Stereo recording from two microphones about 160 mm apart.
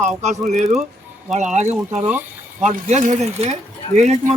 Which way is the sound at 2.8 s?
50° right (ahead or behind).